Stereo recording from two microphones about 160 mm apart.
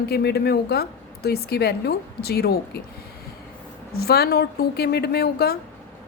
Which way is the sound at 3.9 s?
75° left (ahead or behind).